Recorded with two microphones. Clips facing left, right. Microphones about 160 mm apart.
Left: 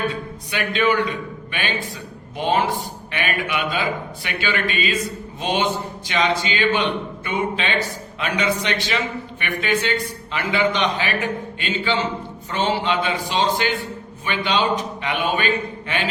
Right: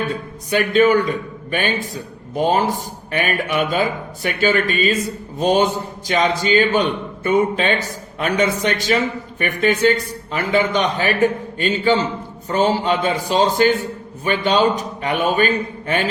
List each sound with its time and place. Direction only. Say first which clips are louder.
0.5 s a man's voice: right 6 dB; 40° right (ahead or behind)